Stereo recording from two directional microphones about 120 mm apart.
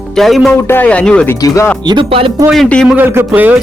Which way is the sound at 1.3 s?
30° left (ahead or behind).